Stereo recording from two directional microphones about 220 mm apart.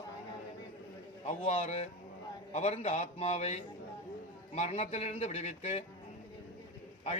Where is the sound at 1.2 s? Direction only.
30° left (ahead or behind).